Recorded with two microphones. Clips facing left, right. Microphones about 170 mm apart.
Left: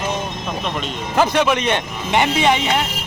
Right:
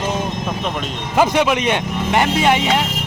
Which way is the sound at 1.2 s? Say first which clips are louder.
Right 1 dB; 10° right (ahead or behind).